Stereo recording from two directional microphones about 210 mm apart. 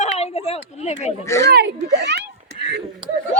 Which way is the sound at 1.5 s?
55° right (ahead or behind).